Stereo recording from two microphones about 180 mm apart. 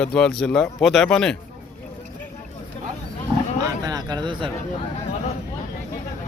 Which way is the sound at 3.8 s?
20° right (ahead or behind).